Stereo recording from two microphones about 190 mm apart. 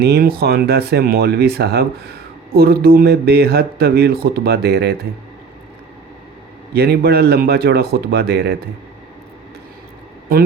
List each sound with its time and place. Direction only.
0.0 s speech: 55° right (ahead or behind)
6.7 s speech: 55° right (ahead or behind)